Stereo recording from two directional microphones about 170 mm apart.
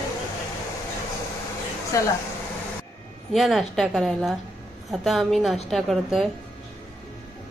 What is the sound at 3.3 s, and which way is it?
A woman's voice, centre (ahead or behind).